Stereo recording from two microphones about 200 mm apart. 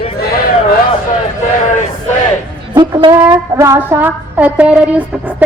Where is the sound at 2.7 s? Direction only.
25° right (ahead or behind).